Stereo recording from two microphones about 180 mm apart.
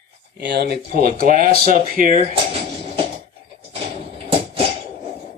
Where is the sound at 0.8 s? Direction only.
55° right (ahead or behind).